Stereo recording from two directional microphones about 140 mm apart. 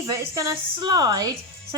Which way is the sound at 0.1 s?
25° right (ahead or behind).